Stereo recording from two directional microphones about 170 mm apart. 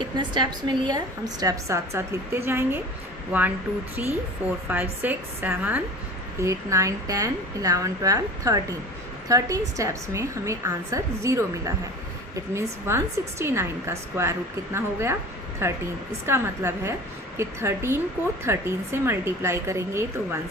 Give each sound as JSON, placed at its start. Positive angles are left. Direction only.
{"t": 0.0, "sound": "a woman's voice", "side_deg": -25}